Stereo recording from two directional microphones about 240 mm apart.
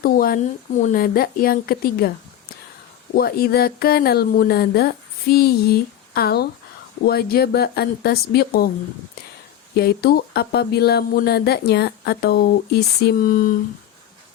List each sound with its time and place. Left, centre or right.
0.0 s speech: left
3.2 s speech: left
9.7 s speech: left